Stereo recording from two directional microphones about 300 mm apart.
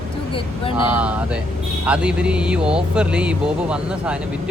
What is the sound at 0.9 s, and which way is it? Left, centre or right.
Speech, centre.